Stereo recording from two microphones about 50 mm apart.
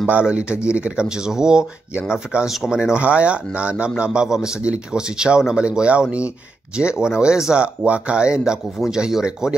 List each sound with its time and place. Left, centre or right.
0.2 s a man's voice: right
7.5 s a man's voice: right